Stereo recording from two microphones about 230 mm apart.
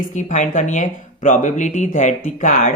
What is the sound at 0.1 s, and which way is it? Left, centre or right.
Speech, left.